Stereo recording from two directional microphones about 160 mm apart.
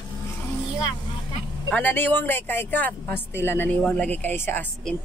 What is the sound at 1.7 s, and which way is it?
Speech, 10° left (ahead or behind).